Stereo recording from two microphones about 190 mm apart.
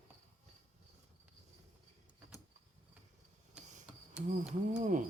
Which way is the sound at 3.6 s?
5° right (ahead or behind).